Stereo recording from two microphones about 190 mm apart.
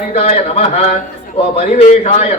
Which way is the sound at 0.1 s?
35° left (ahead or behind).